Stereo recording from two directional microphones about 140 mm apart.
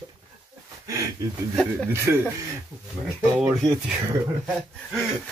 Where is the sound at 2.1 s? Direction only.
15° right (ahead or behind).